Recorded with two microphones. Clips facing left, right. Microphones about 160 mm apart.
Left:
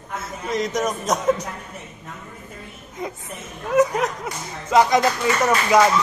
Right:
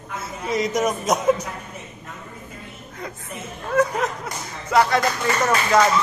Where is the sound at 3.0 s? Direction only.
20° left (ahead or behind).